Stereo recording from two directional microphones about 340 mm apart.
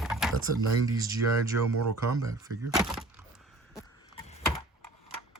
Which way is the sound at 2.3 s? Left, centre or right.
Centre.